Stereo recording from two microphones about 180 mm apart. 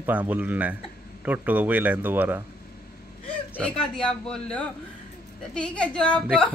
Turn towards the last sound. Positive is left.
turn(degrees=5)  # may be behind; listen again after turning